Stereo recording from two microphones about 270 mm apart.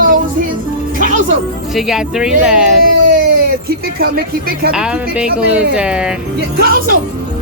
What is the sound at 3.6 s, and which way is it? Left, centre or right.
Speech, right.